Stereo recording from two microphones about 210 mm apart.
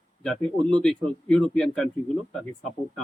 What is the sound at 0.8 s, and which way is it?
A man's voice, 5° left (ahead or behind).